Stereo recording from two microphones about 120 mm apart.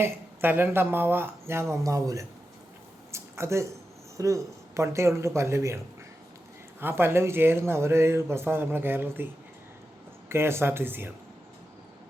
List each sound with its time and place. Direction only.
0.0 s speech: 15° right (ahead or behind)
3.1 s a sound: 25° right (ahead or behind)
4.2 s speech: 25° right (ahead or behind)
10.2 s speech: 20° right (ahead or behind)